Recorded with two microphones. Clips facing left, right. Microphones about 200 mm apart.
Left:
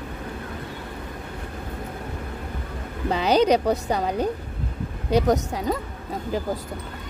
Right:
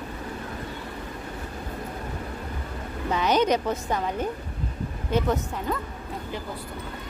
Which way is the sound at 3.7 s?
70° left (ahead or behind).